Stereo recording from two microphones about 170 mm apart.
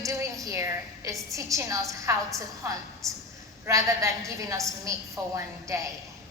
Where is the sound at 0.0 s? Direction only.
20° right (ahead or behind).